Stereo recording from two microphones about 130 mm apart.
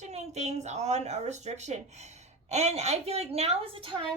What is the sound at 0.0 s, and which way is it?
A woman's voice, 60° right (ahead or behind).